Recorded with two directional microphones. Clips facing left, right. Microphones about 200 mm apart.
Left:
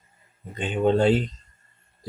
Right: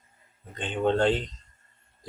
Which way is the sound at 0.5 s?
10° left (ahead or behind).